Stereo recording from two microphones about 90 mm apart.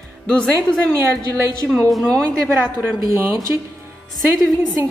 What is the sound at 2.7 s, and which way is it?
Speech, 25° right (ahead or behind).